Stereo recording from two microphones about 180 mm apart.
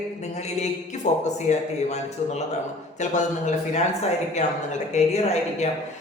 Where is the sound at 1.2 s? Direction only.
40° left (ahead or behind).